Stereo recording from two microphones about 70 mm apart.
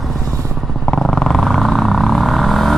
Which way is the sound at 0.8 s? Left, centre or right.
Centre.